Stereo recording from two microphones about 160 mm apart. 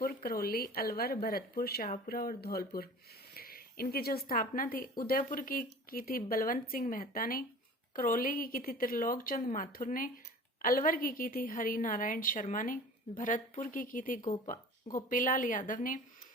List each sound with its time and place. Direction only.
0.0 s speech: 65° left (ahead or behind)